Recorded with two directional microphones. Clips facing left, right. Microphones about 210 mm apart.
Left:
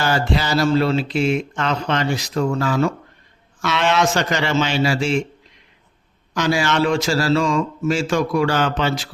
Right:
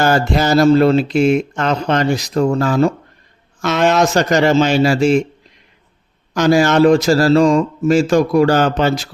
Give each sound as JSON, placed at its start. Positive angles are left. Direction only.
{"t": 0.0, "sound": "speech", "side_deg": -45}
{"t": 6.3, "sound": "speech", "side_deg": -45}